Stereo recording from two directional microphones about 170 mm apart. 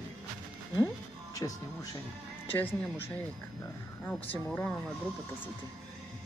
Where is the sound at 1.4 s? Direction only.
25° left (ahead or behind).